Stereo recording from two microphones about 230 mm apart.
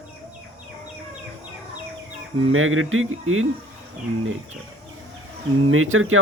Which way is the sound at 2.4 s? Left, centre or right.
Right.